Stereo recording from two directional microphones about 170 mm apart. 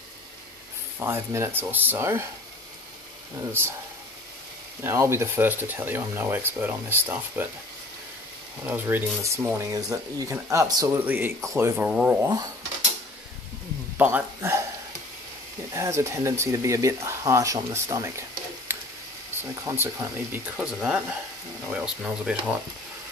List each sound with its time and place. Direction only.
0.9 s speech: 15° right (ahead or behind)
3.6 s speech: 15° right (ahead or behind)
4.8 s speech: 15° right (ahead or behind)
8.6 s speech: 10° right (ahead or behind)
13.9 s a sound: 10° right (ahead or behind)
15.7 s speech: 15° right (ahead or behind)
18.7 s tick: 10° right (ahead or behind)
19.6 s speech: 15° right (ahead or behind)